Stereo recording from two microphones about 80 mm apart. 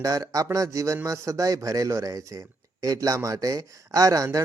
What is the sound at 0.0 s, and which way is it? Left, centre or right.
A man's voice, right.